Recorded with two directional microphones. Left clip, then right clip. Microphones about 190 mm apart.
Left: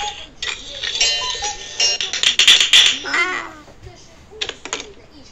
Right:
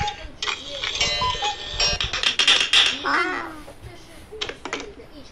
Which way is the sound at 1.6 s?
5° left (ahead or behind).